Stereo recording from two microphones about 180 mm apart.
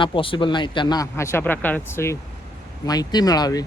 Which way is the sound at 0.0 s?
30° left (ahead or behind).